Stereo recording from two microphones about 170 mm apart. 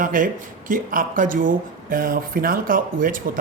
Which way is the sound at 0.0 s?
55° right (ahead or behind).